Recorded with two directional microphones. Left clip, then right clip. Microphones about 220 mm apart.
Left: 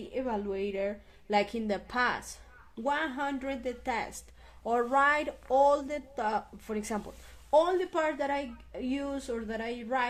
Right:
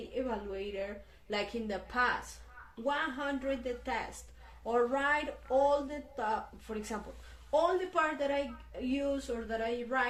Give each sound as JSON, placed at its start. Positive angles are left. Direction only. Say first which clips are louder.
{"t": 0.1, "sound": "a woman's voice", "louder": "left 4 dB", "side_deg": 50}